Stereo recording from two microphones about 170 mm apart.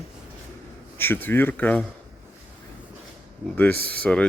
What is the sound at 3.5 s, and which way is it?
Speech, 10° left (ahead or behind).